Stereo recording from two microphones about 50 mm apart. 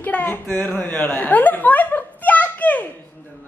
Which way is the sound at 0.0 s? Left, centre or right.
Left.